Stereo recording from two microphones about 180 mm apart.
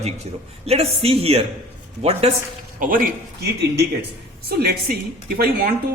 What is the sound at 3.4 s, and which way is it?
A woman's voice, 65° right (ahead or behind).